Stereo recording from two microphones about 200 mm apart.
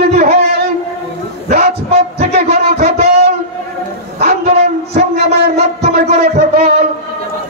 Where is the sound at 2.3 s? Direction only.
50° right (ahead or behind).